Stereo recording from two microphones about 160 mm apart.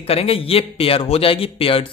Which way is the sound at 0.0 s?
35° left (ahead or behind).